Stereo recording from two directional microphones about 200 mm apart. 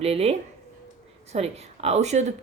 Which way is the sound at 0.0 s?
30° right (ahead or behind).